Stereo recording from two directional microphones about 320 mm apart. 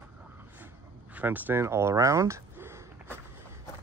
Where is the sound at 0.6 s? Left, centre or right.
Centre.